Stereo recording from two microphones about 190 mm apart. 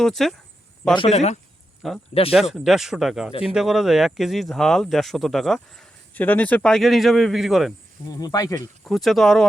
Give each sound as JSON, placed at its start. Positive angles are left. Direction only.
{"t": 0.0, "sound": "speech", "side_deg": 0}
{"t": 0.9, "sound": "speech", "side_deg": 35}
{"t": 1.8, "sound": "speech", "side_deg": 0}
{"t": 8.1, "sound": "speech", "side_deg": 20}
{"t": 8.8, "sound": "speech", "side_deg": 0}